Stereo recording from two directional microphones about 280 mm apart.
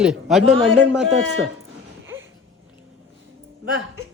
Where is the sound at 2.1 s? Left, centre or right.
Centre.